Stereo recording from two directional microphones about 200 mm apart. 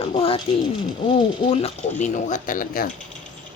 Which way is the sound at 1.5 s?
35° left (ahead or behind).